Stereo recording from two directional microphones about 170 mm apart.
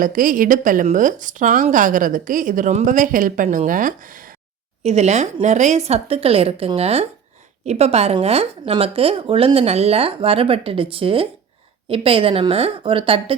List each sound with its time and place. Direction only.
0.0 s speech: 50° right (ahead or behind)
4.8 s speech: 40° right (ahead or behind)